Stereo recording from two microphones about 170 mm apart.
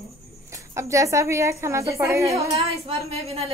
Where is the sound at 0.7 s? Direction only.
15° right (ahead or behind).